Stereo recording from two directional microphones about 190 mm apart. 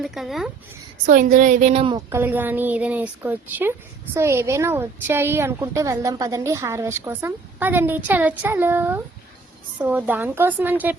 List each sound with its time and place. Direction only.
0.0 s speech: centre (ahead or behind)
1.0 s a woman's voice: 45° right (ahead or behind)
2.0 s speech: 10° right (ahead or behind)